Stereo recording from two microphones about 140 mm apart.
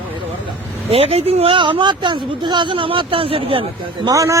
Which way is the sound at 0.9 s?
45° right (ahead or behind).